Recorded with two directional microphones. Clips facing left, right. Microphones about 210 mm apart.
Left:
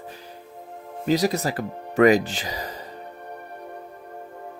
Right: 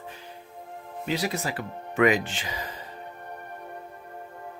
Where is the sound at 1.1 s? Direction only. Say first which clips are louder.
Left 7 dB; 40° left (ahead or behind).